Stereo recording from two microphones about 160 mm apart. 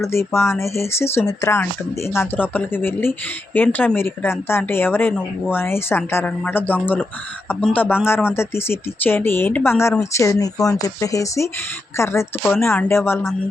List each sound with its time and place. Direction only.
0.0 s speech: 15° left (ahead or behind)